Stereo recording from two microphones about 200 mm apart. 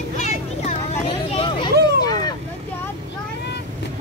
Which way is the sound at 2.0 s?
20° left (ahead or behind).